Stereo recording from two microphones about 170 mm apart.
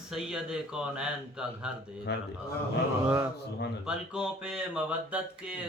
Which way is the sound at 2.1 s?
80° left.